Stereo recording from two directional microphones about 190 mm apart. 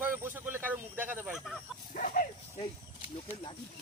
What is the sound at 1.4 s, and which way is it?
Speech, centre (ahead or behind).